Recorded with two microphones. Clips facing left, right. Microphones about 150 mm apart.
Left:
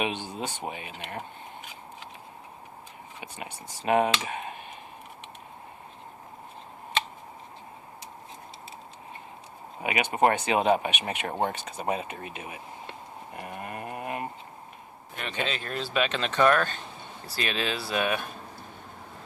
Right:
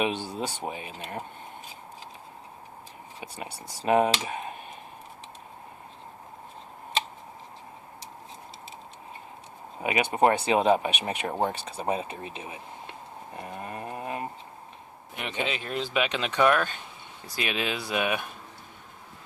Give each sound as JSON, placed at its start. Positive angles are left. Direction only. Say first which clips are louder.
{"t": 0.0, "sound": "speech", "louder": "right 2 dB", "side_deg": -40}
{"t": 3.2, "sound": "speech", "louder": "right 1 dB", "side_deg": -35}
{"t": 9.8, "sound": "speech", "louder": "right 1 dB", "side_deg": -40}
{"t": 13.3, "sound": "a sound", "louder": "even", "side_deg": -30}
{"t": 15.1, "sound": "speech", "louder": "right 1 dB", "side_deg": -15}